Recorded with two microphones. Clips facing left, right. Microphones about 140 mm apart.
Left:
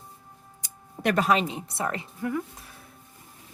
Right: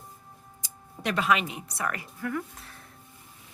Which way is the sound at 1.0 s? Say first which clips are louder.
Left 3 dB; 45° left (ahead or behind).